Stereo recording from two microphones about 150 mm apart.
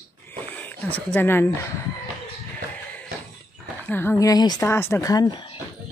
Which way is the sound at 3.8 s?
15° left (ahead or behind).